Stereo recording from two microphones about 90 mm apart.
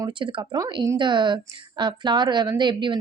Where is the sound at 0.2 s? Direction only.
70° right (ahead or behind).